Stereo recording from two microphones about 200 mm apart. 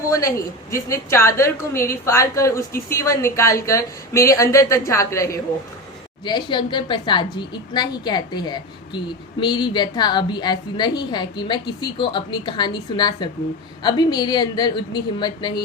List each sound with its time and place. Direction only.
0.1 s a woman's voice: 15° left (ahead or behind)